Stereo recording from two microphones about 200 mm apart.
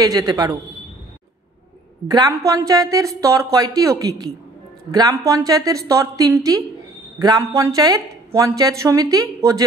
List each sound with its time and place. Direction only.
0.0 s a man's voice: 20° right (ahead or behind)
2.0 s a man's voice: 20° right (ahead or behind)